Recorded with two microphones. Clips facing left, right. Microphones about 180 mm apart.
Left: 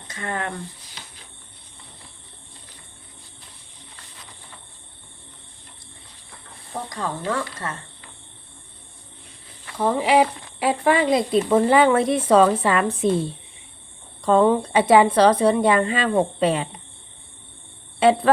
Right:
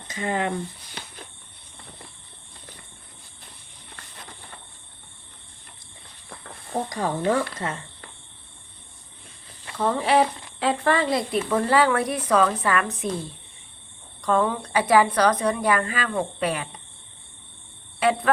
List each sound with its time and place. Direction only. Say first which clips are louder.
0.1 s speech: right 3 dB; 20° right (ahead or behind)
0.9 s a sound: right 5 dB; 55° right (ahead or behind)
6.7 s speech: right 4 dB; 35° right (ahead or behind)
7.3 s speech: right 3 dB; 15° right (ahead or behind)
9.7 s speech: left 2 dB; 10° left (ahead or behind)
18.0 s speech: left 5 dB; 30° left (ahead or behind)